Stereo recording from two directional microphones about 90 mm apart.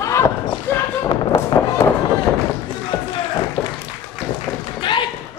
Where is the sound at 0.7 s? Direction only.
20° left (ahead or behind).